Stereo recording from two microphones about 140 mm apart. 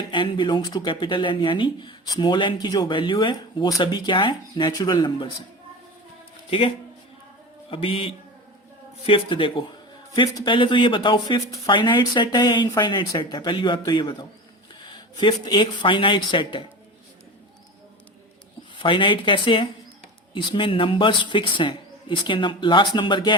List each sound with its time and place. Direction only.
0.0 s speech: 35° left (ahead or behind)
6.5 s speech: 40° left (ahead or behind)
18.8 s speech: 35° left (ahead or behind)